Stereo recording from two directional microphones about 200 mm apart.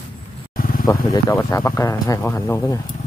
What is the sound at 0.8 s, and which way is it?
Speech, 15° left (ahead or behind).